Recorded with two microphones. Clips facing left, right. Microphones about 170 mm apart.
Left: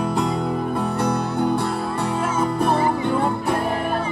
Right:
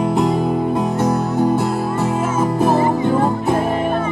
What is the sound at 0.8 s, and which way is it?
Music, 20° right (ahead or behind).